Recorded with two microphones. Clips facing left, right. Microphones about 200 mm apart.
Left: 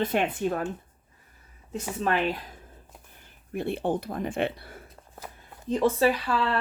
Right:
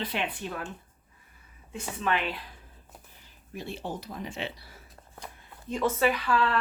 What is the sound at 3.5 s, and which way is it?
Speech, 60° left (ahead or behind).